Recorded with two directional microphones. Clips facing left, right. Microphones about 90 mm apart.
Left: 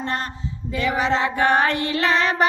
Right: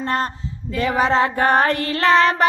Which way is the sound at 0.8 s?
40° right (ahead or behind).